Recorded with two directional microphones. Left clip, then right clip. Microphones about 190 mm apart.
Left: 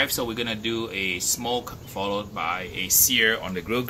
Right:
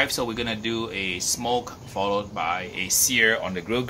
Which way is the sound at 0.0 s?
5° left (ahead or behind).